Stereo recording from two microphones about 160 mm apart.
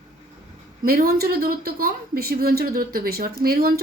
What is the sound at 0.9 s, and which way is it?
Speech, 70° right (ahead or behind).